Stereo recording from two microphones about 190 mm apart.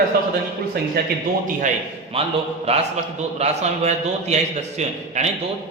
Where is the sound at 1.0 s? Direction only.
60° right (ahead or behind).